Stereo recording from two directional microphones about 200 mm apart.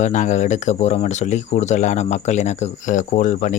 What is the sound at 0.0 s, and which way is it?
Speech, 40° left (ahead or behind).